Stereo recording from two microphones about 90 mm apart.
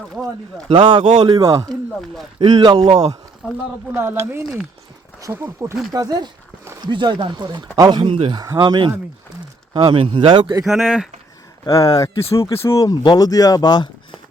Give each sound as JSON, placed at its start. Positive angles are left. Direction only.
{"t": 0.7, "sound": "a man's voice", "side_deg": -60}
{"t": 2.4, "sound": "speech", "side_deg": -60}
{"t": 3.9, "sound": "speech", "side_deg": -25}
{"t": 5.9, "sound": "a man's voice", "side_deg": -45}
{"t": 6.8, "sound": "a man's voice", "side_deg": -55}
{"t": 8.0, "sound": "speech", "side_deg": -90}
{"t": 8.5, "sound": "speech", "side_deg": -65}
{"t": 9.7, "sound": "speech", "side_deg": -75}
{"t": 10.7, "sound": "speech", "side_deg": 0}
{"t": 11.6, "sound": "speech", "side_deg": 40}